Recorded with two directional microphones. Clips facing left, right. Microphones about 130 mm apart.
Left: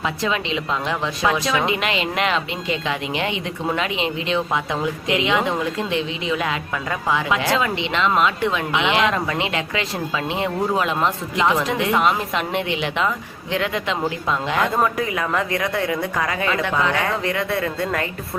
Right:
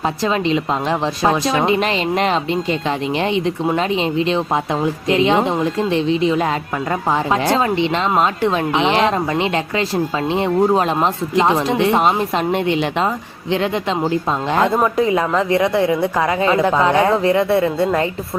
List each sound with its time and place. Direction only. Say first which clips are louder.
0.0 s speech: right 5 dB; 40° right (ahead or behind)
3.8 s a woman's voice: right 6 dB; 35° right (ahead or behind)